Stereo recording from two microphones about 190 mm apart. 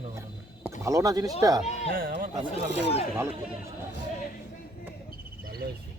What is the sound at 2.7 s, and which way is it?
Speech, 65° right (ahead or behind).